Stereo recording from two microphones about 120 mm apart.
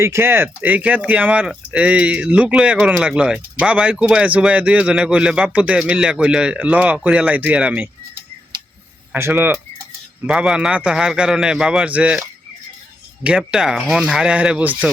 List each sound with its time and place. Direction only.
0.0 s speech: 20° right (ahead or behind)
9.1 s speech: 20° right (ahead or behind)
10.2 s speech: 5° right (ahead or behind)
13.2 s speech: 5° right (ahead or behind)